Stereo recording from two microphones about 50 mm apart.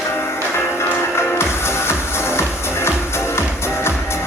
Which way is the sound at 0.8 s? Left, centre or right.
Left.